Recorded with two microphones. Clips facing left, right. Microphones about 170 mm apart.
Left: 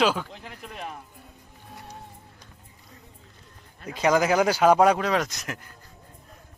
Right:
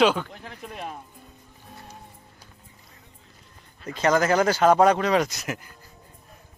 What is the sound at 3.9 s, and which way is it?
Speech, 10° left (ahead or behind).